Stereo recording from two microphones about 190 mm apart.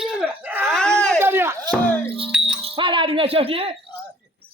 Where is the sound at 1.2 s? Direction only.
10° right (ahead or behind).